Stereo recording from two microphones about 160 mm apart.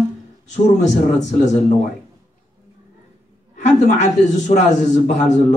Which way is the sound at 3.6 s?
50° left (ahead or behind).